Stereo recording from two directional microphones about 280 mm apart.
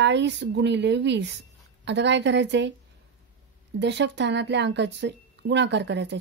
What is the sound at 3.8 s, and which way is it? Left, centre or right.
Speech, right.